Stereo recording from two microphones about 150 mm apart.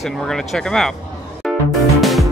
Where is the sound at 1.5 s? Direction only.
Centre (ahead or behind).